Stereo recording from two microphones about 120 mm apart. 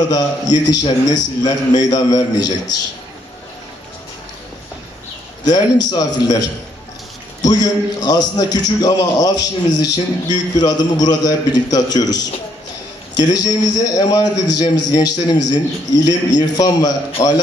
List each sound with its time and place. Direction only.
0.1 s a man's voice: 35° left (ahead or behind)
5.5 s a man's voice: 35° left (ahead or behind)